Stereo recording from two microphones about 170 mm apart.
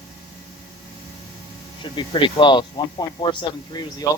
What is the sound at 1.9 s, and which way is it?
Speech, 30° left (ahead or behind).